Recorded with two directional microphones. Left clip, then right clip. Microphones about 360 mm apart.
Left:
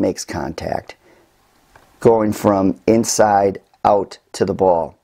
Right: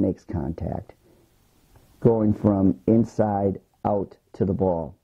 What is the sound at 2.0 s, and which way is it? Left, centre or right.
Speech, centre.